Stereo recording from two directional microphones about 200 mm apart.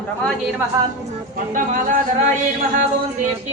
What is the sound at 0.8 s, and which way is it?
Speech, 15° right (ahead or behind).